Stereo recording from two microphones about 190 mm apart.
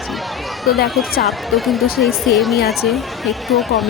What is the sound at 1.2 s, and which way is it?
Speech, centre (ahead or behind).